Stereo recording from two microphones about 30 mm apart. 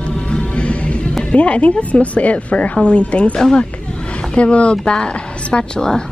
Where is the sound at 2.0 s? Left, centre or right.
Left.